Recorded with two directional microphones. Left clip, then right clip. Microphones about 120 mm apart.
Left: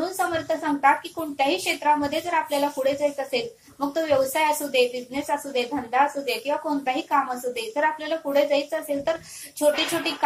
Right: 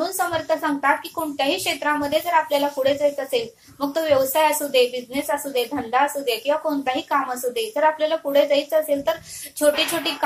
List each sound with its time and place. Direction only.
0.2 s a woman's voice: 25° right (ahead or behind)